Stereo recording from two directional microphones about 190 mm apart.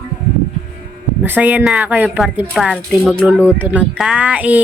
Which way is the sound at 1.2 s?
10° right (ahead or behind).